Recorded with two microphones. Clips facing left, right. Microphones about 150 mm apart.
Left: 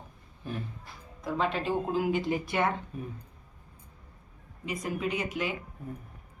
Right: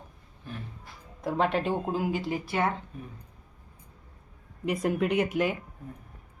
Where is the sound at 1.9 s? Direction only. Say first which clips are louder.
Left 1 dB; 40° right (ahead or behind).